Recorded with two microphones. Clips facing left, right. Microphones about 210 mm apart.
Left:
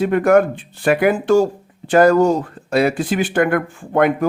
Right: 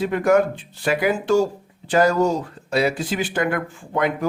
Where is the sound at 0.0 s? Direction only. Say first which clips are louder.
Left 4 dB; 55° left (ahead or behind).